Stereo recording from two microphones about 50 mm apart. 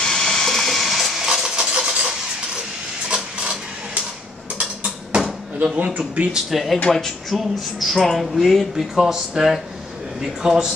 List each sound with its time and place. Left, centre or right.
0.0 s vehicle: centre
4.6 s a sound: centre
5.9 s speech: right
6.3 s speech: centre